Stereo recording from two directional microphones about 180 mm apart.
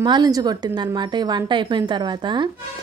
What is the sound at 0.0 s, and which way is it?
A woman's voice, 25° right (ahead or behind).